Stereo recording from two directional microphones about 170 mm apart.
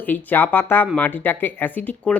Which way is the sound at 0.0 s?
10° left (ahead or behind).